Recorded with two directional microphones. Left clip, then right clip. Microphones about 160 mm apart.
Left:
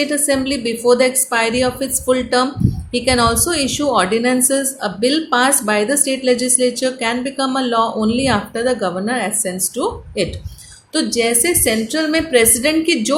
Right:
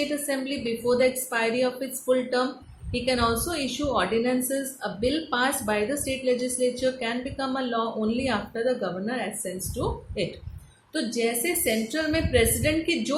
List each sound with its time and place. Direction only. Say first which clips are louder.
0.1 s a woman's voice: left 11 dB; 55° left (ahead or behind)